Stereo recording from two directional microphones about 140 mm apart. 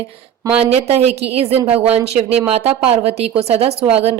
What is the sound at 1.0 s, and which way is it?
Speech, 45° right (ahead or behind).